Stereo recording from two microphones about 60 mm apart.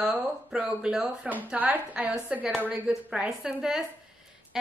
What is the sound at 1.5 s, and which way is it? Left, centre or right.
A woman's voice, right.